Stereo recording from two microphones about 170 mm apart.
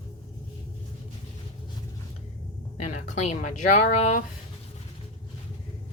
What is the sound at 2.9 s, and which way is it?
Speech, 45° left (ahead or behind).